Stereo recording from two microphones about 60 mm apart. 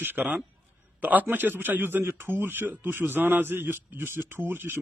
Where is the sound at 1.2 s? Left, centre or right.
Right.